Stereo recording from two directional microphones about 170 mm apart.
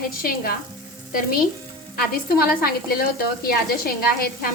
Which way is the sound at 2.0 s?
60° left (ahead or behind).